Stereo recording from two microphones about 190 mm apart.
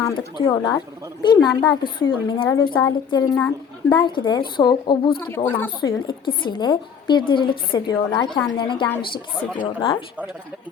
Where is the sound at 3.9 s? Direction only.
25° left (ahead or behind).